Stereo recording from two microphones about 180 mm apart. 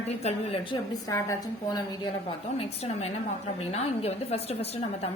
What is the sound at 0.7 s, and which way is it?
Speech, 20° left (ahead or behind).